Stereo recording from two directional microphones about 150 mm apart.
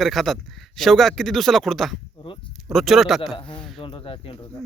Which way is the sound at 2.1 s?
35° left (ahead or behind).